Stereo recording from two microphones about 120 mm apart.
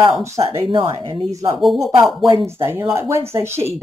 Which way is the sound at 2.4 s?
20° right (ahead or behind).